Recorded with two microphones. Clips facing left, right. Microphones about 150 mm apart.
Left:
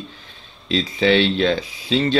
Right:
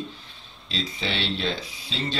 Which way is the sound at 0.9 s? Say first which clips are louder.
Left 15 dB; 85° left.